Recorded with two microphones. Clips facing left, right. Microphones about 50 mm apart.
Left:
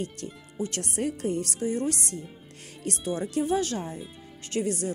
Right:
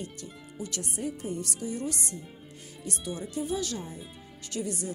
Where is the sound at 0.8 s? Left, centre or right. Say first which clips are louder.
Left 4 dB; left.